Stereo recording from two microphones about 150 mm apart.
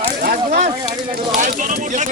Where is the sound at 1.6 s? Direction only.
55° right (ahead or behind).